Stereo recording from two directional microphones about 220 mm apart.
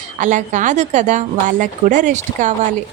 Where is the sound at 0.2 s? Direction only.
35° right (ahead or behind).